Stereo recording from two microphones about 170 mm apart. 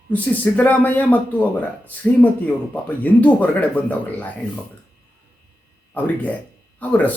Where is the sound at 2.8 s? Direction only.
10° left (ahead or behind).